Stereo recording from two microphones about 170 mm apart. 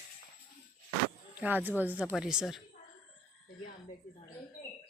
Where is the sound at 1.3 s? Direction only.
10° right (ahead or behind).